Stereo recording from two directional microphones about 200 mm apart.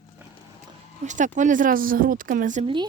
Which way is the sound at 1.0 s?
40° right (ahead or behind).